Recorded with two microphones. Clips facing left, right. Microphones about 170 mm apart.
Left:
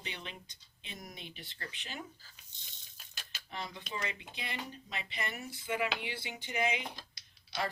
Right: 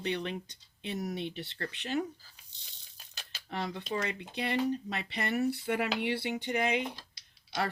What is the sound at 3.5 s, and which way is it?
Speech, 70° right (ahead or behind).